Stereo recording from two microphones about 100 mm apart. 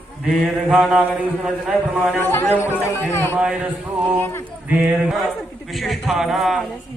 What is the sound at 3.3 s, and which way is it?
A man's voice, 10° right (ahead or behind).